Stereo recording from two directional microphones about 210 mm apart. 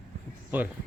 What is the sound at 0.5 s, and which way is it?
Speech, 10° right (ahead or behind).